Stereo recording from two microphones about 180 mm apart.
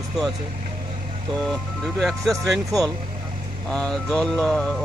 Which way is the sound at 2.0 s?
Centre (ahead or behind).